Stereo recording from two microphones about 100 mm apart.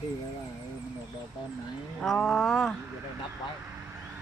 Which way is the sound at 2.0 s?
5° left (ahead or behind).